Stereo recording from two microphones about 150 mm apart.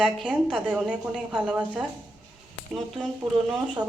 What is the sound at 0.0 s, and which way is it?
Speech, 5° right (ahead or behind).